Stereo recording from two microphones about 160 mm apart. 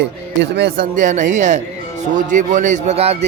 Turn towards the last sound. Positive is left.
turn(degrees=-40)  # may be behind; listen again after turning